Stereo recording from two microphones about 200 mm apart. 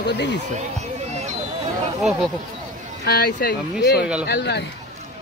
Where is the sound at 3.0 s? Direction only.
50° left (ahead or behind).